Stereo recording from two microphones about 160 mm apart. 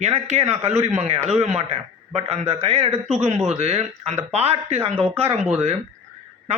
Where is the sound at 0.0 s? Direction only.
45° right (ahead or behind).